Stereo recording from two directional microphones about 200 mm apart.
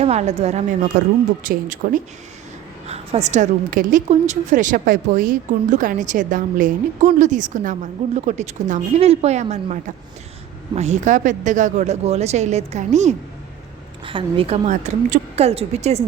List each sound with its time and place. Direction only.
0.0 s a woman's voice: 30° right (ahead or behind)
0.9 s a woman's voice: 50° right (ahead or behind); by 16.0 s 30° right (ahead or behind)